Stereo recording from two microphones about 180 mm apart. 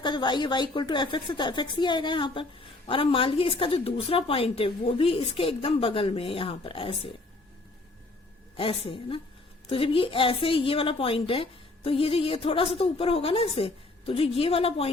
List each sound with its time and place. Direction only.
0.0 s a woman's voice: 25° left (ahead or behind)
8.5 s a woman's voice: 30° left (ahead or behind)